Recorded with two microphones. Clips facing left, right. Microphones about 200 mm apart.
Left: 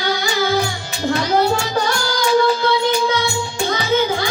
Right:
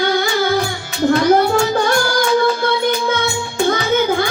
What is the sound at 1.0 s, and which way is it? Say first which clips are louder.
Child singing: right 5 dB; 50° right (ahead or behind).